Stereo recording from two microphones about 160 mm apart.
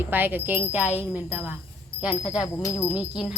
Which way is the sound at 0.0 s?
10° right (ahead or behind).